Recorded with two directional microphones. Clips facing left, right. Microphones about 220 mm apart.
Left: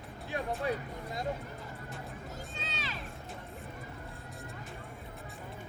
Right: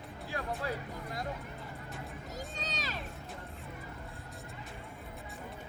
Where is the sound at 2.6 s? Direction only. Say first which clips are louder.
Right 1 dB; 40° right (ahead or behind).